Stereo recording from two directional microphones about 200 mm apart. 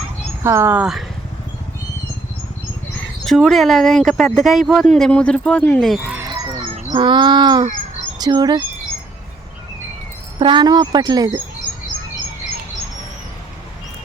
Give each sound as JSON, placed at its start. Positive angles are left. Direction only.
{"t": 0.4, "sound": "speech", "side_deg": -10}
{"t": 3.2, "sound": "speech", "side_deg": 0}
{"t": 6.1, "sound": "a sound", "side_deg": -20}
{"t": 6.9, "sound": "speech", "side_deg": -25}
{"t": 10.4, "sound": "speech", "side_deg": -25}